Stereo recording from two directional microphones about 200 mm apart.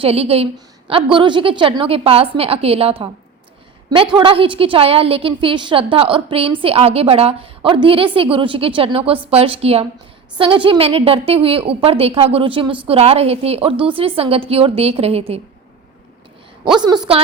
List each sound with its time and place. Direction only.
0.0 s a woman's voice: 30° right (ahead or behind)
16.7 s a woman's voice: 20° right (ahead or behind)